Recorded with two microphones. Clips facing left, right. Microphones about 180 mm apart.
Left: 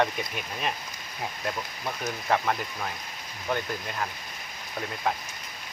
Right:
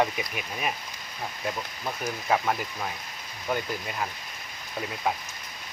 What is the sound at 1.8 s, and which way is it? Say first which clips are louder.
Speech: even; 5° right (ahead or behind).